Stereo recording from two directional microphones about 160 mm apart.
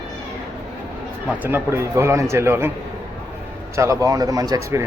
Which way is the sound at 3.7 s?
20° right (ahead or behind).